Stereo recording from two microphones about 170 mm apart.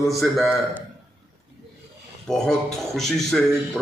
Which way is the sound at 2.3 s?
5° left (ahead or behind).